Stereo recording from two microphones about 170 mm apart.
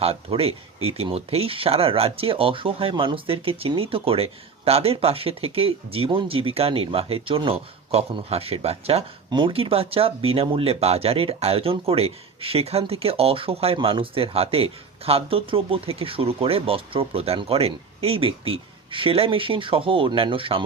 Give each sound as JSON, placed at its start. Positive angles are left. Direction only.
{"t": 0.0, "sound": "speech", "side_deg": -35}